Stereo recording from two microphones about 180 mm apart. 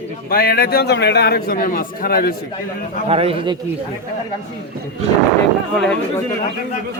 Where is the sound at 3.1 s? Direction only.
30° right (ahead or behind).